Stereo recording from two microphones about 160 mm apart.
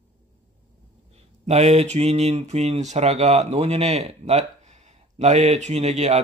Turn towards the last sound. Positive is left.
turn(degrees=-45)  # may be behind; listen again after turning